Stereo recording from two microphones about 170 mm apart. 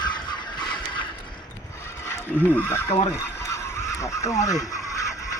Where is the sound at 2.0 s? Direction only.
15° left (ahead or behind).